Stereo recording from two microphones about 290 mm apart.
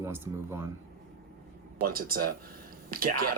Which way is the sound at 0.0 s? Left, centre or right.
Centre.